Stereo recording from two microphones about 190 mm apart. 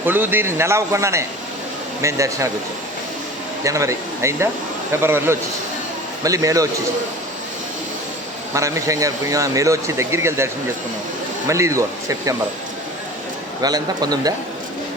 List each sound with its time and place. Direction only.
0.0 s speech: 10° right (ahead or behind)
3.6 s speech: 15° right (ahead or behind)
8.5 s speech: 15° right (ahead or behind)
13.6 s speech: 20° right (ahead or behind)